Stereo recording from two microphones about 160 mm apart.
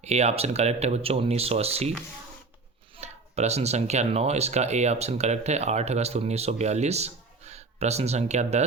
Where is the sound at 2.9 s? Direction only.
45° right (ahead or behind).